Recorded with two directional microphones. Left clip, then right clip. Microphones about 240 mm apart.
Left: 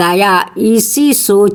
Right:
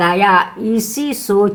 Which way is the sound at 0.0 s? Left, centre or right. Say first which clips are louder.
Left 2 dB; left.